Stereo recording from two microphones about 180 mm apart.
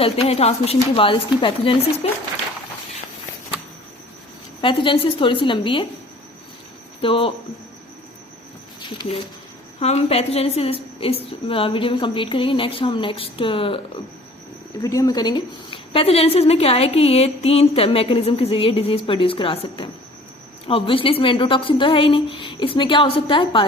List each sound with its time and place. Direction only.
0.0 s a woman's voice: 35° left (ahead or behind)
4.6 s a woman's voice: 30° left (ahead or behind)
7.0 s a woman's voice: 30° left (ahead or behind)
8.9 s a woman's voice: 30° left (ahead or behind)
14.8 s a woman's voice: 20° left (ahead or behind)